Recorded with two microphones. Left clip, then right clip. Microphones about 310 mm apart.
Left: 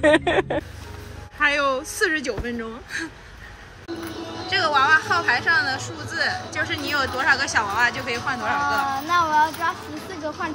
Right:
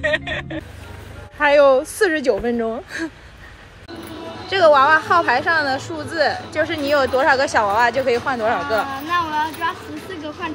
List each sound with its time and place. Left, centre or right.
0.0 s speech: centre
1.4 s a woman's voice: centre
4.5 s a woman's voice: centre